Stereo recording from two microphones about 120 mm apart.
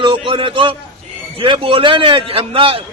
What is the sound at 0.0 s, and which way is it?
A man's voice, 45° right (ahead or behind).